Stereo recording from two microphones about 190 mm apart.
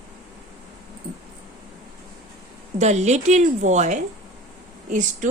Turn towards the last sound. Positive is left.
turn(degrees=-40)  # may be behind; listen again after turning